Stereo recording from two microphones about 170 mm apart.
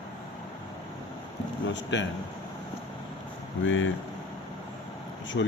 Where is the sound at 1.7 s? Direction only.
90° left.